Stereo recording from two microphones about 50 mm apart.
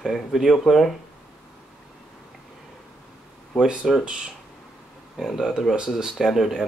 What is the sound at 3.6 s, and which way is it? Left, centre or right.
Speech, centre.